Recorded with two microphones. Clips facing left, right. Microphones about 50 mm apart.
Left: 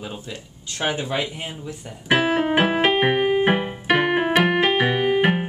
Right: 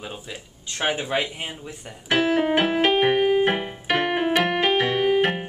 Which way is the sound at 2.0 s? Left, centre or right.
Centre.